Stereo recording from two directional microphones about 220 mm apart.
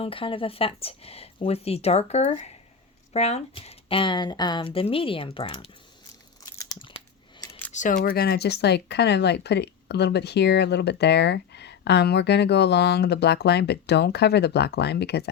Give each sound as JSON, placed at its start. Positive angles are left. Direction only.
{"t": 0.0, "sound": "speech", "side_deg": 25}
{"t": 6.4, "sound": "crunch", "side_deg": 15}
{"t": 7.7, "sound": "speech", "side_deg": 35}